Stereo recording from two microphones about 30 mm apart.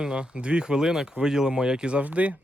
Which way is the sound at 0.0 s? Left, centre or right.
Right.